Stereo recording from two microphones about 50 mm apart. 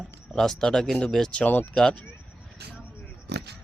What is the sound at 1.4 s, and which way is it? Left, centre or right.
Speech, left.